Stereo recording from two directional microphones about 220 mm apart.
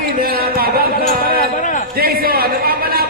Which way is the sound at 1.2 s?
35° left (ahead or behind).